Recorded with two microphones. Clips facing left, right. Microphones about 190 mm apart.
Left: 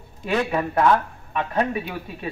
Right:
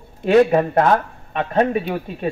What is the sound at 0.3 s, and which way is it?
Speech, 45° right (ahead or behind).